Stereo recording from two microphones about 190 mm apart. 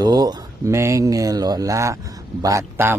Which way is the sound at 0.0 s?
20° right (ahead or behind).